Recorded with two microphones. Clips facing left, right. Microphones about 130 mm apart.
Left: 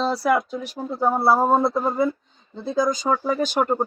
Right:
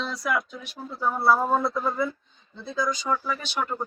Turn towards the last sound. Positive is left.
turn(degrees=45)  # may be behind; listen again after turning